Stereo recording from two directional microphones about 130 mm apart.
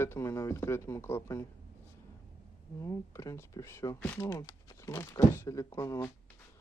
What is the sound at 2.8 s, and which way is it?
Speech, 25° left (ahead or behind).